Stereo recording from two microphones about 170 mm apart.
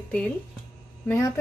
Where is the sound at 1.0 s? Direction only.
15° left (ahead or behind).